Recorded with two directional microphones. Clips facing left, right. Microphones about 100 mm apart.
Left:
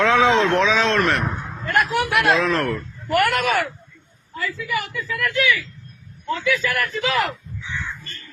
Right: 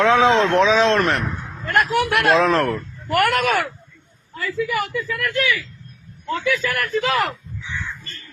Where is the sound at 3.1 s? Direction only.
50° right (ahead or behind).